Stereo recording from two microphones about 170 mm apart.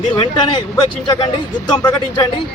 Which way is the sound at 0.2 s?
25° left (ahead or behind).